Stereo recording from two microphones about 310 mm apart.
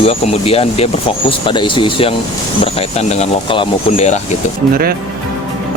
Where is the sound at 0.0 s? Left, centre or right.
Centre.